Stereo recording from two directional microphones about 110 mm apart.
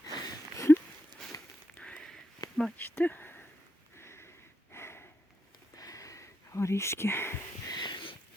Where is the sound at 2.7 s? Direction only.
20° left (ahead or behind).